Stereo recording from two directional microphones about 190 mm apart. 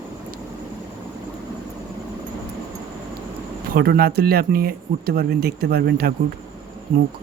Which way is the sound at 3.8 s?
55° right (ahead or behind).